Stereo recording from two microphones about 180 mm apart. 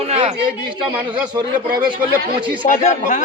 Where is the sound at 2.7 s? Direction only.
45° left (ahead or behind).